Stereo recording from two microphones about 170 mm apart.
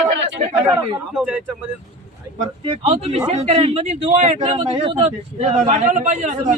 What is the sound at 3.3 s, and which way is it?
A man's voice, 40° right (ahead or behind).